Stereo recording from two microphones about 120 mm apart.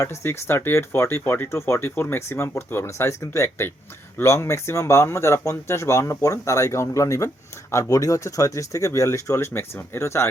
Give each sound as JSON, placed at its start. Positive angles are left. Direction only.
{"t": 0.0, "sound": "speech", "side_deg": 20}